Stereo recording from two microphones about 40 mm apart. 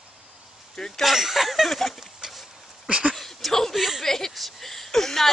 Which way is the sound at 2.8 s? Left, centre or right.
Right.